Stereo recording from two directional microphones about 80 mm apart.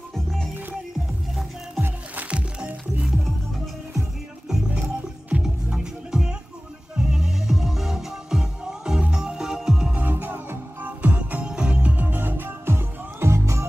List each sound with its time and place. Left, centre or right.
0.1 s music: centre
1.8 s music: centre
9.9 s music: right